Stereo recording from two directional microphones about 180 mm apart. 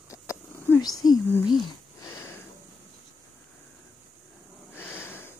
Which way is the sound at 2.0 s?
15° left (ahead or behind).